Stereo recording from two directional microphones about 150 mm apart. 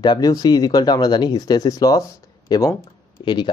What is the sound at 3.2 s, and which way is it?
Speech, 30° left (ahead or behind).